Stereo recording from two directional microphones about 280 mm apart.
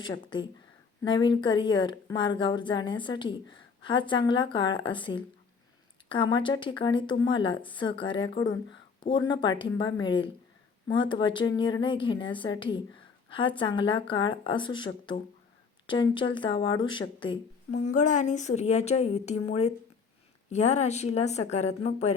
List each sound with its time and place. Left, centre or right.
0.0 s a woman's voice: centre